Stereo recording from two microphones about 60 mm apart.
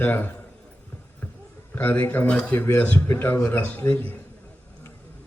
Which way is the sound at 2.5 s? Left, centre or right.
Left.